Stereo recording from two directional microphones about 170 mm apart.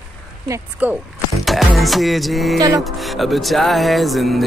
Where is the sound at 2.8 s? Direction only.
Centre (ahead or behind).